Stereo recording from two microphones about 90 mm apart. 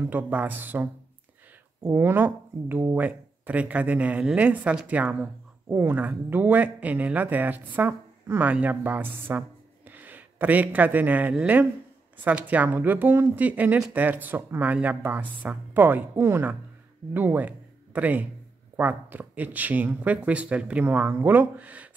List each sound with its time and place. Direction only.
0.1 s a man's voice: 20° right (ahead or behind)